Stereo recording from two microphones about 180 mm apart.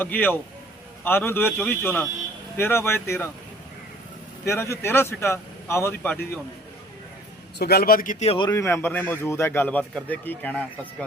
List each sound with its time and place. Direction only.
0.0 s a man's voice: 10° left (ahead or behind)
4.4 s a man's voice: 15° left (ahead or behind)
7.6 s speech: 60° left (ahead or behind); by 8.4 s 35° left (ahead or behind)
8.4 s a man's voice: 15° left (ahead or behind)